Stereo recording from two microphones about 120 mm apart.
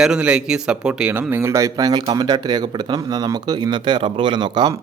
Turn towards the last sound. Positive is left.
turn(degrees=-40)  # may be behind; listen again after turning